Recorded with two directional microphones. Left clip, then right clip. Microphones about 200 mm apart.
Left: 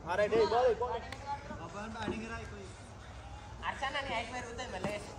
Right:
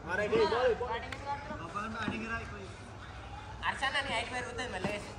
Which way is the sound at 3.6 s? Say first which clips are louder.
Right 4 dB; 35° left (ahead or behind).